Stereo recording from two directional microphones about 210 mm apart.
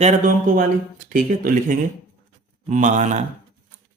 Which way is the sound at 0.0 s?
40° right (ahead or behind).